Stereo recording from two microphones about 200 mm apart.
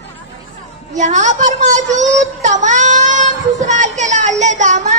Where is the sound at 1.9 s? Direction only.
35° right (ahead or behind).